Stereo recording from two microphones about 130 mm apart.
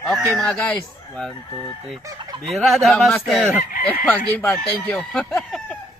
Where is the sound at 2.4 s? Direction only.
Centre (ahead or behind).